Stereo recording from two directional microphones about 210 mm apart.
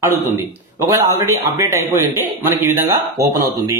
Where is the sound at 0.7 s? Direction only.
15° right (ahead or behind).